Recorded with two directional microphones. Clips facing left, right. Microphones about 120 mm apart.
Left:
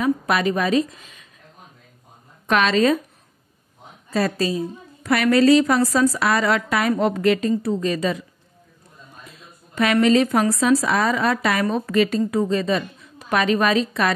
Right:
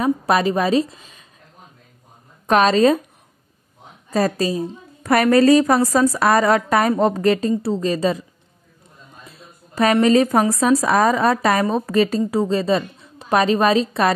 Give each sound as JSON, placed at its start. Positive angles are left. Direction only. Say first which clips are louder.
{"t": 0.0, "sound": "a woman's voice", "louder": "right 2 dB", "side_deg": -35}
{"t": 2.4, "sound": "a woman's voice", "louder": "right 4 dB", "side_deg": -40}
{"t": 4.1, "sound": "a woman's voice", "louder": "right 2 dB", "side_deg": -35}
{"t": 9.8, "sound": "a woman's voice", "louder": "right 2 dB", "side_deg": -35}